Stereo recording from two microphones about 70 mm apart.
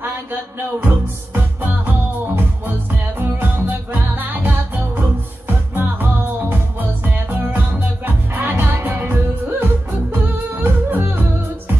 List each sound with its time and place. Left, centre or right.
0.7 s music: right